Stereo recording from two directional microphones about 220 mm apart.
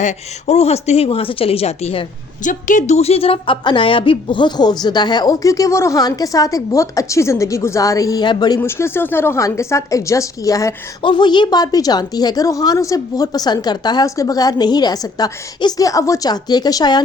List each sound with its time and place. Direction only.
0.0 s a woman's voice: 30° left (ahead or behind)